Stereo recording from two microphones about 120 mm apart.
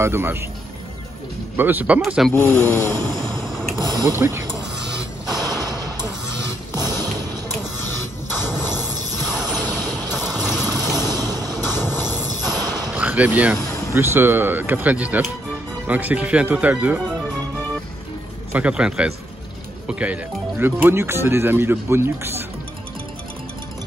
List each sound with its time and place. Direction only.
0.0 s speech: 20° right (ahead or behind)
1.6 s speech: 15° right (ahead or behind)
2.0 s speech: centre (ahead or behind)
2.3 s speech: 15° left (ahead or behind)
3.7 s speech: 35° right (ahead or behind)
4.2 s speech: 20° right (ahead or behind)
5.3 s music: 35° right (ahead or behind)
8.6 s a sound: 35° right (ahead or behind)
9.5 s vehicle: 10° left (ahead or behind)
11.0 s vehicle: 35° right (ahead or behind)
11.8 s a sound: 15° left (ahead or behind)
12.4 s a sound: 35° right (ahead or behind)
12.9 s speech: 10° right (ahead or behind)
18.5 s speech: 10° right (ahead or behind)